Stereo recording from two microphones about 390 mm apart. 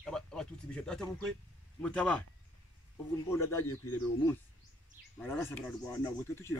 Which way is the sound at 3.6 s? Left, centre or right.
Left.